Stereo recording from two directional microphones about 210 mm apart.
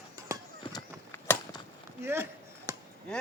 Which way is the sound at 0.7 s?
15° left (ahead or behind).